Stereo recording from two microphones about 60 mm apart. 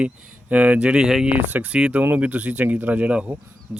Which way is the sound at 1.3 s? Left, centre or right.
Right.